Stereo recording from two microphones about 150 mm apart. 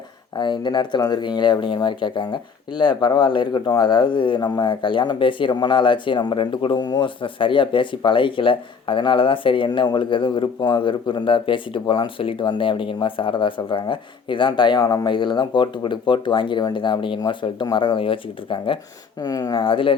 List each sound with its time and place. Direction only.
0.3 s speech: 30° left (ahead or behind)